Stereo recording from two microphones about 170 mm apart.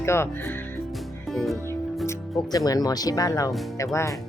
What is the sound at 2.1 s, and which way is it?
Speech, 20° left (ahead or behind).